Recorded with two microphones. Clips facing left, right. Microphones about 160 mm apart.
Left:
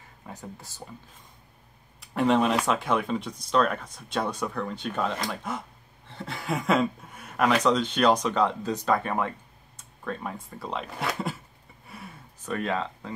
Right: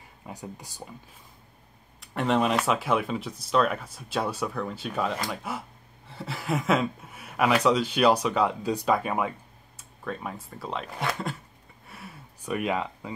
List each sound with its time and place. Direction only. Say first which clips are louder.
0.3 s speech: right 2 dB; 15° right (ahead or behind)
2.0 s speech: left 2 dB; centre (ahead or behind)
11.9 s a sound: left 1 dB; 5° right (ahead or behind)